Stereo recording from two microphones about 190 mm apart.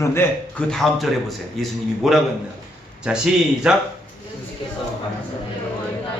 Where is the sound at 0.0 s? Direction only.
15° left (ahead or behind).